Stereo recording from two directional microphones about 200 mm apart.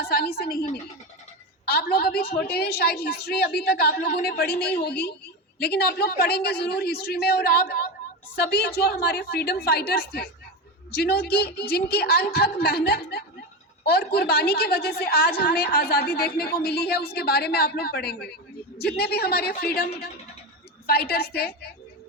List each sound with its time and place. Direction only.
0.1 s a woman's voice: 50° left (ahead or behind)